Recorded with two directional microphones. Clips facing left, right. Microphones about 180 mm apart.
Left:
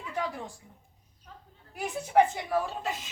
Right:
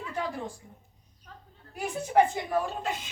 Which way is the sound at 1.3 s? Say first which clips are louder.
Right 1 dB; 10° left (ahead or behind).